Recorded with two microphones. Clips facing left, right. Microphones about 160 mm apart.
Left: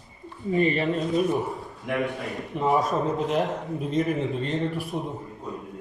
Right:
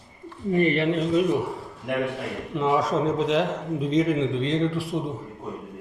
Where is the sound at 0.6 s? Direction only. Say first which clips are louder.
Right 3 dB; 65° right (ahead or behind).